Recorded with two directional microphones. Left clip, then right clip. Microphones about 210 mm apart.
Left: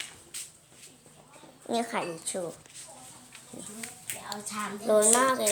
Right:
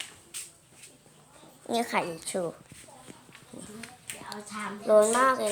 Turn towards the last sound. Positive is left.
turn(degrees=0)  # may be behind; listen again after turning